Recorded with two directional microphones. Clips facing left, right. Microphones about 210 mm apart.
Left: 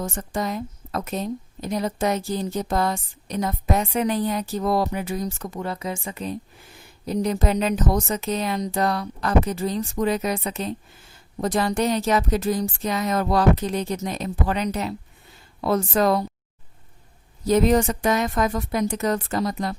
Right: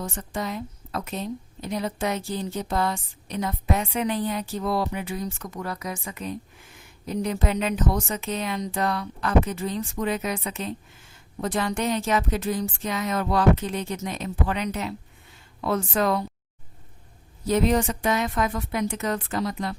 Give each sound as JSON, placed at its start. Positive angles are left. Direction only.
{"t": 0.0, "sound": "a woman's voice", "side_deg": 45}
{"t": 17.4, "sound": "a woman's voice", "side_deg": 40}